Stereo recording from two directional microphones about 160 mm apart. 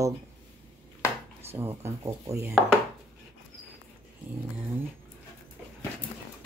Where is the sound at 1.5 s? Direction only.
15° right (ahead or behind).